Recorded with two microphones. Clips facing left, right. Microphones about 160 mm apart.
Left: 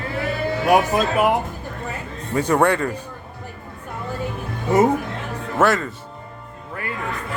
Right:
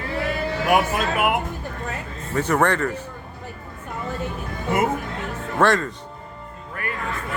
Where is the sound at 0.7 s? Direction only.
35° left (ahead or behind).